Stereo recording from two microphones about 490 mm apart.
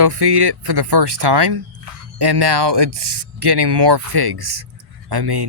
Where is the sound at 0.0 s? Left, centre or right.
Right.